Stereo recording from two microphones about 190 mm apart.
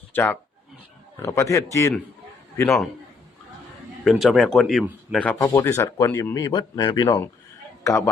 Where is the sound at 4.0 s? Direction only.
Centre (ahead or behind).